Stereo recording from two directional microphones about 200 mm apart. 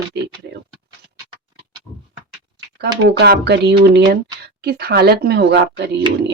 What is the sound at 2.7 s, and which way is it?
Speech, 55° right (ahead or behind).